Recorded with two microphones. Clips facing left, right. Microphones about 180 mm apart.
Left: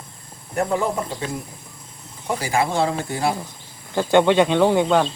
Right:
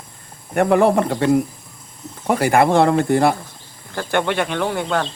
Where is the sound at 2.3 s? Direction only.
60° right (ahead or behind).